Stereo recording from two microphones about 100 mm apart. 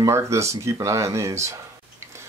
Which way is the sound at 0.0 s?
30° right (ahead or behind).